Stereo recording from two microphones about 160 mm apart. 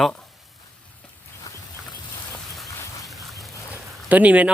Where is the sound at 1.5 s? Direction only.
20° left (ahead or behind).